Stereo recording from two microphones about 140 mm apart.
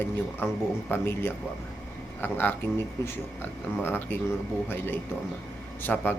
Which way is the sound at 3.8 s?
15° left (ahead or behind).